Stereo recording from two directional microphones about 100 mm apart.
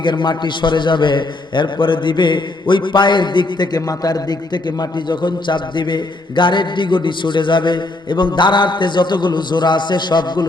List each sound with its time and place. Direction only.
0.0 s a man's voice: 50° left (ahead or behind)